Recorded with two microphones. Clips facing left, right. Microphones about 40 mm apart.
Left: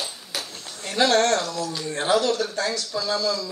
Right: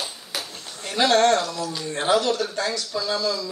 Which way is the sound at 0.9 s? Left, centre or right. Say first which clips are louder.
Right 1 dB; centre.